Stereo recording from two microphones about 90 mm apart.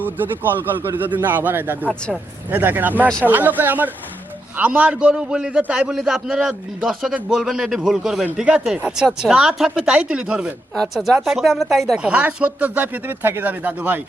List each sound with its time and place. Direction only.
0.0 s a man's voice: 20° right (ahead or behind)
10.8 s speech: centre (ahead or behind)
11.9 s speech: 10° right (ahead or behind)